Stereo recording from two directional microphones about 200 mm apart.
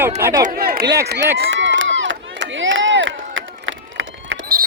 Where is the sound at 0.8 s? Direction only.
15° right (ahead or behind).